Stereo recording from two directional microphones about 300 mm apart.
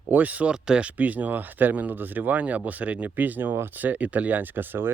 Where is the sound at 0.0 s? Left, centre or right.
Centre.